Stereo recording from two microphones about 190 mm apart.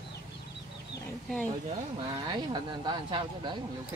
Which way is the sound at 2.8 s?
25° right (ahead or behind).